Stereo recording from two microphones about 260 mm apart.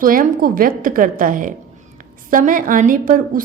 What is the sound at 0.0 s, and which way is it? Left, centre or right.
A woman's voice, right.